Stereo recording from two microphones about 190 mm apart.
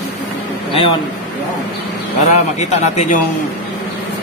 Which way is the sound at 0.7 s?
30° left (ahead or behind).